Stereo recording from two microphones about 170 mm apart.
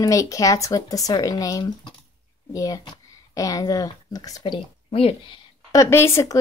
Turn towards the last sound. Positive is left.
turn(degrees=15)  # may be behind; listen again after turning